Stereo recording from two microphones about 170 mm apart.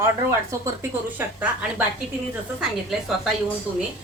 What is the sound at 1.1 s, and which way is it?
Speech, 10° right (ahead or behind).